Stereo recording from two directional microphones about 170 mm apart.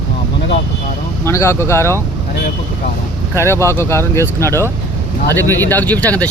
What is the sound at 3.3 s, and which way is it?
Speech, 15° left (ahead or behind).